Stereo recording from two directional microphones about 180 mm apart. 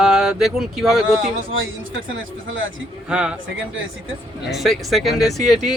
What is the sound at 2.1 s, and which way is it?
Speech, 90° right.